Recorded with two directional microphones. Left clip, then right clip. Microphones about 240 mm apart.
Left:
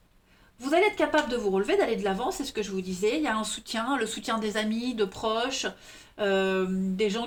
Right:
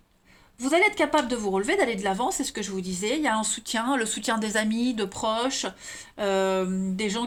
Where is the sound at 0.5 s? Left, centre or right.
Right.